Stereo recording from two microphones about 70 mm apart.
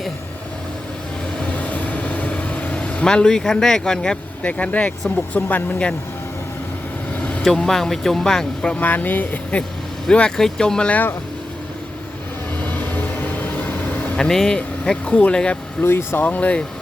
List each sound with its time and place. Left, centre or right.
1.4 s vehicle: centre
7.2 s vehicle: centre
7.4 s speech: centre; by 9.6 s left
10.1 s speech: centre
12.6 s vehicle: left
14.2 s speech: centre
15.8 s speech: left